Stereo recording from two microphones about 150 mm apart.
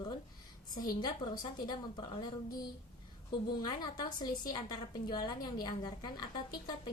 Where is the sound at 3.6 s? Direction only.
25° left (ahead or behind).